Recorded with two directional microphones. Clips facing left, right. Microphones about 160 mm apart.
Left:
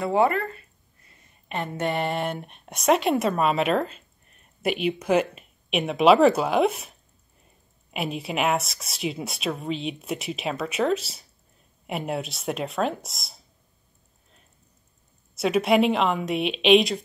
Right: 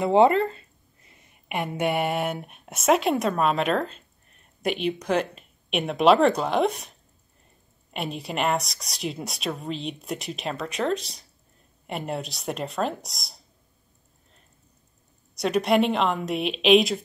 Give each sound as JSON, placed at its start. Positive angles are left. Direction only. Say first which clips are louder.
{"t": 0.0, "sound": "a sound", "louder": "right 4 dB", "side_deg": -25}
{"t": 1.5, "sound": "speech", "louder": "right 2 dB", "side_deg": -10}
{"t": 7.9, "sound": "speech", "louder": "left 2 dB", "side_deg": 0}
{"t": 15.3, "sound": "speech", "louder": "left 1 dB", "side_deg": 5}